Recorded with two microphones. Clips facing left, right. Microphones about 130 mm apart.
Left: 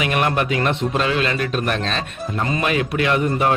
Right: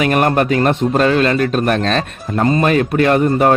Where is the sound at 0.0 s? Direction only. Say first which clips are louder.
Right 6 dB; 45° right (ahead or behind).